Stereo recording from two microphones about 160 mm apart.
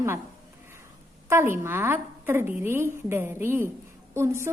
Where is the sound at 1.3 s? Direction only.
15° right (ahead or behind).